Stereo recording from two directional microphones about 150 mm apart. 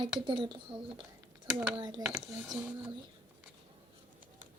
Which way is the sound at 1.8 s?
30° right (ahead or behind).